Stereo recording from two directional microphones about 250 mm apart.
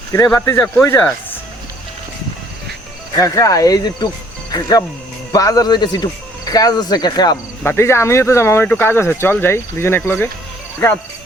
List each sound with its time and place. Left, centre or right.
0.1 s speech: centre
3.2 s speech: centre
5.3 s speech: centre